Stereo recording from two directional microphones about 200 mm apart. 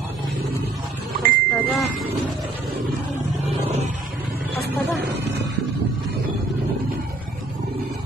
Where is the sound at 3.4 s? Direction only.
30° right (ahead or behind).